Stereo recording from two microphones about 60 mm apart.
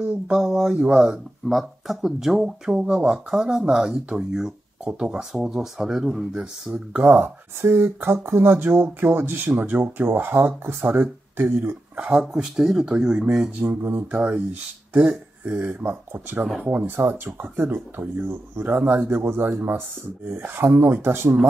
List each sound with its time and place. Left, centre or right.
0.0 s speech: centre
6.7 s speech: right
7.2 s speech: right
12.0 s speech: centre
14.1 s speech: right
15.0 s speech: centre
15.5 s speech: right